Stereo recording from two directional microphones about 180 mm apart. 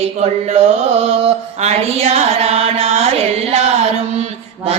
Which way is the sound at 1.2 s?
35° right (ahead or behind).